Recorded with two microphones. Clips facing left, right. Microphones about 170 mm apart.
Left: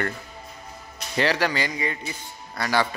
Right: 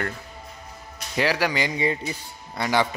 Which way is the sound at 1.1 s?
10° right (ahead or behind).